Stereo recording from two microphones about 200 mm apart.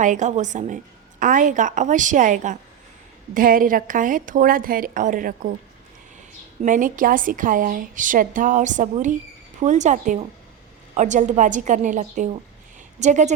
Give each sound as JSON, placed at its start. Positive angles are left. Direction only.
{"t": 0.0, "sound": "a woman's voice", "side_deg": -40}
{"t": 6.6, "sound": "a woman's voice", "side_deg": -40}